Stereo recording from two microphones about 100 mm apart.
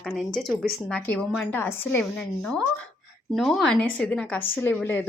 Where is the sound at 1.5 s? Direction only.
20° left (ahead or behind).